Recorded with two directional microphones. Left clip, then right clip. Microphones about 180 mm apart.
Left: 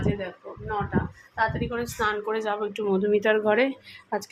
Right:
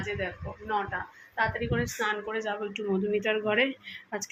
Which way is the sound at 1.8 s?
15° left (ahead or behind).